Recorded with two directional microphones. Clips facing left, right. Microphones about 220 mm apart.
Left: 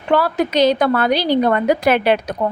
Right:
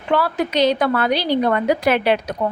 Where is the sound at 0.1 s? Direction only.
45° left (ahead or behind).